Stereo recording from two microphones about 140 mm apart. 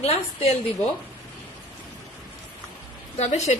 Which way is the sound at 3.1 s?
50° left (ahead or behind).